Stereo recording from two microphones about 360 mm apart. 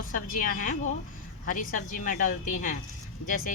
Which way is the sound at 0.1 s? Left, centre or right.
Left.